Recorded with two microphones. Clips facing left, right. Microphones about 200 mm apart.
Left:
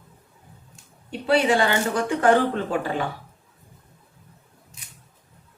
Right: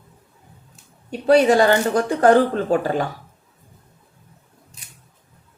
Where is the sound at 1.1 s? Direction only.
40° right (ahead or behind).